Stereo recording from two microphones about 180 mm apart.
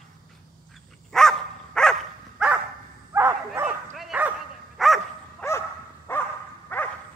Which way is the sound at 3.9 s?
5° right (ahead or behind).